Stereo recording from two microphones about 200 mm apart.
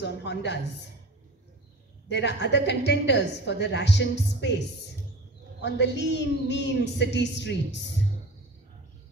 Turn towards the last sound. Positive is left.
turn(degrees=60)  # may be behind; listen again after turning